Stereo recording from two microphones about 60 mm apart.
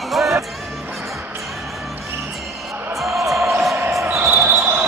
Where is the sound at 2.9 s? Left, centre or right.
Centre.